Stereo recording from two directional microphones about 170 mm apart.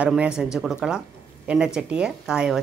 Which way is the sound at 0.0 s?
5° right (ahead or behind).